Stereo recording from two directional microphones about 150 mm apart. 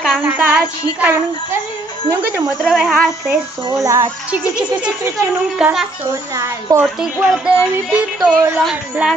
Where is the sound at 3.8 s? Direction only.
20° right (ahead or behind).